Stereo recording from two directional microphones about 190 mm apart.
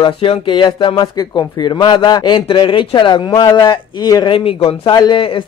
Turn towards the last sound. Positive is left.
turn(degrees=25)  # may be behind; listen again after turning